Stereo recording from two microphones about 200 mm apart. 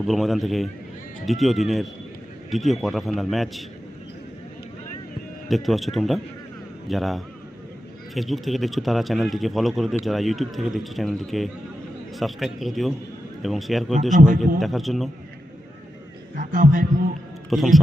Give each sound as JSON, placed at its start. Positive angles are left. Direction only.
{"t": 0.1, "sound": "speech", "side_deg": 0}
{"t": 5.5, "sound": "speech", "side_deg": 0}
{"t": 14.1, "sound": "a man's voice", "side_deg": -40}
{"t": 14.6, "sound": "speech", "side_deg": 0}
{"t": 16.3, "sound": "a man's voice", "side_deg": -40}
{"t": 17.5, "sound": "speech", "side_deg": 0}